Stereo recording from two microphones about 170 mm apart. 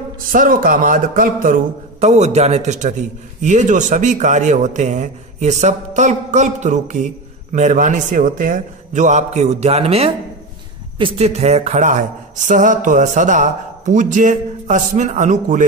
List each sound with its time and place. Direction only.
0.3 s speech: 55° right (ahead or behind)